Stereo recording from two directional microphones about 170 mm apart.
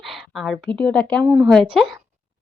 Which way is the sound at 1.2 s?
10° right (ahead or behind).